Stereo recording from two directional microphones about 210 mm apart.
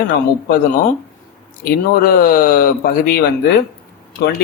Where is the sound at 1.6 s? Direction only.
45° left (ahead or behind).